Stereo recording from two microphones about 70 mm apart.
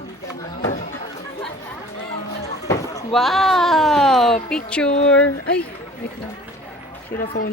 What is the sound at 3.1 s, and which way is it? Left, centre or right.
Speech, centre.